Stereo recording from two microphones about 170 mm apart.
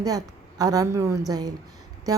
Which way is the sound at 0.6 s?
20° right (ahead or behind).